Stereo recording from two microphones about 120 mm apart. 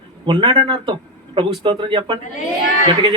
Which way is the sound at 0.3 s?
45° right (ahead or behind).